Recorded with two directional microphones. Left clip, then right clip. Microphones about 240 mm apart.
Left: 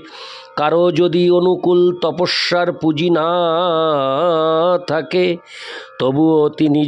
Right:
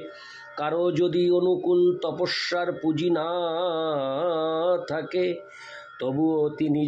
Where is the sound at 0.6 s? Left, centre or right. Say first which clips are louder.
Left 10 dB; left.